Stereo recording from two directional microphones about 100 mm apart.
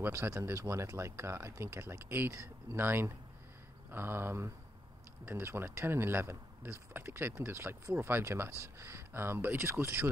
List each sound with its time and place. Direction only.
0.0 s speech: 25° right (ahead or behind)